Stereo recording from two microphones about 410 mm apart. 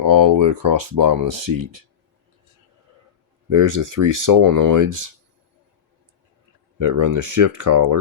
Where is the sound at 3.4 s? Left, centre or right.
Right.